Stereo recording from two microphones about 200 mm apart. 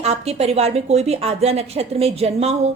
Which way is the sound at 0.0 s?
30° right (ahead or behind).